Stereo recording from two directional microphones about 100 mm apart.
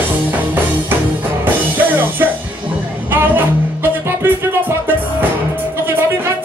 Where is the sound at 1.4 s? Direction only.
20° right (ahead or behind).